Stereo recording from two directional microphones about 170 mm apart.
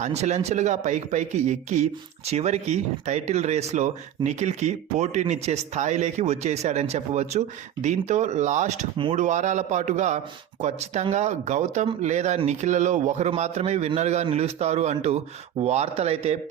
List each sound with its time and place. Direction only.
0.0 s speech: 40° right (ahead or behind)